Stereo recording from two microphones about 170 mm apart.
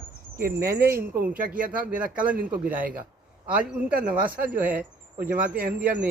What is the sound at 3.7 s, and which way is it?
Speech, 5° right (ahead or behind).